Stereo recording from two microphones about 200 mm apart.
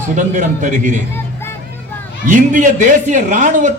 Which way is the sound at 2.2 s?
40° right (ahead or behind).